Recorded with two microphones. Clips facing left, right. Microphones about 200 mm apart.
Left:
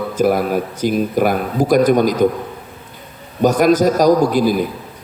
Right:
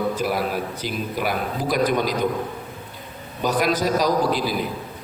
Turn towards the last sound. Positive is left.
turn(degrees=50)  # may be behind; listen again after turning